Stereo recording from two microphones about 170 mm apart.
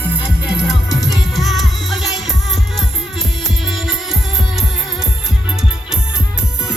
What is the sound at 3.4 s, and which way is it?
Music, centre (ahead or behind).